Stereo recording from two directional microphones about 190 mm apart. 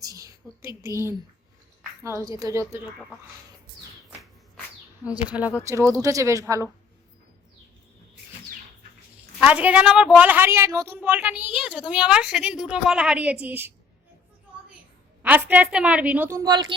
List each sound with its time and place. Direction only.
0.0 s a woman's voice: 15° right (ahead or behind)
5.1 s a woman's voice: 5° right (ahead or behind)
9.4 s a woman's voice: 5° right (ahead or behind)
15.2 s a woman's voice: 10° right (ahead or behind)